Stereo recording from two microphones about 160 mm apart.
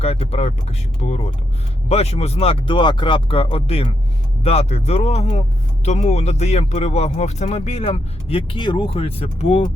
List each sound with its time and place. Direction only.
0.0 s speech: 40° left (ahead or behind)